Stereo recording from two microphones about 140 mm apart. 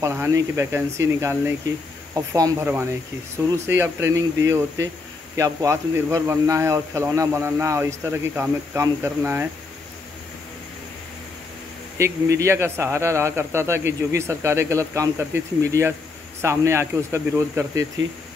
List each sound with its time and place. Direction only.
0.0 s speech: 20° right (ahead or behind)
12.0 s speech: 20° right (ahead or behind)